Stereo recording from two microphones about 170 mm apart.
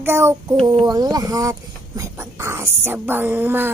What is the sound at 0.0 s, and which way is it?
Child singing, 15° right (ahead or behind).